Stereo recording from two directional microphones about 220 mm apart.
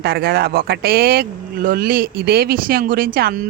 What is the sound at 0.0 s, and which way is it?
Speech, 45° right (ahead or behind).